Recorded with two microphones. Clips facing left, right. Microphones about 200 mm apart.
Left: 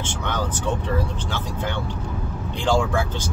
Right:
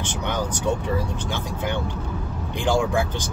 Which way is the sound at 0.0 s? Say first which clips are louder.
Even; 15° right (ahead or behind).